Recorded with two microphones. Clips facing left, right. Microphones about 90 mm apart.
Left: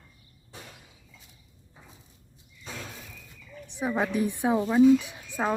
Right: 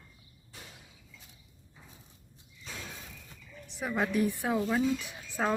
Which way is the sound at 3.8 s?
20° left (ahead or behind).